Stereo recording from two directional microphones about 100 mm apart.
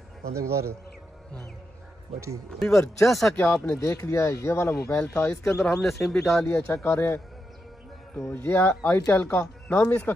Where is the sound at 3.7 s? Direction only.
30° left (ahead or behind).